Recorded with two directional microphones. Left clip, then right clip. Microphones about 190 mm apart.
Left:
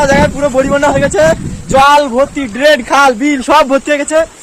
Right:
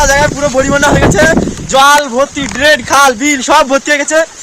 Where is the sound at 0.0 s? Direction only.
5° right (ahead or behind).